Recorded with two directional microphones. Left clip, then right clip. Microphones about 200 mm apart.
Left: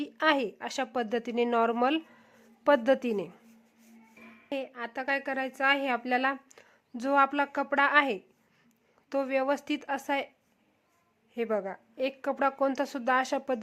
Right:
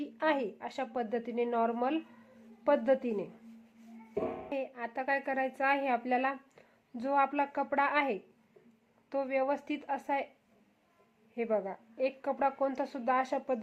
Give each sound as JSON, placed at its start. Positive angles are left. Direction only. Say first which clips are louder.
{"t": 0.0, "sound": "a woman's voice", "louder": "left 5 dB", "side_deg": 20}
{"t": 4.4, "sound": "a woman's voice", "louder": "left 2 dB", "side_deg": 15}
{"t": 11.3, "sound": "a woman's voice", "louder": "left 2 dB", "side_deg": 20}